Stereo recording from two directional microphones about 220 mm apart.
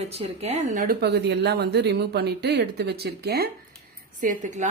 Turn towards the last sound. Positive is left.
turn(degrees=-35)  # may be behind; listen again after turning